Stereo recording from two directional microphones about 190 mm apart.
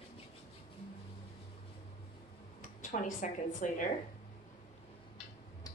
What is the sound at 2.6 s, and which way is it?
Speech, 40° left (ahead or behind).